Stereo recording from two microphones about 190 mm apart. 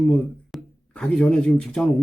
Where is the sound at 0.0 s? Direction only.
5° left (ahead or behind).